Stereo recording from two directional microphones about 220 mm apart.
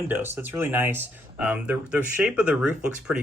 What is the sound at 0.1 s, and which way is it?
Speech, 10° right (ahead or behind).